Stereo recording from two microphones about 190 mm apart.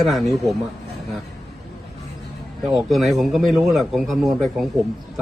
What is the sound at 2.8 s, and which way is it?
A man's voice, centre (ahead or behind).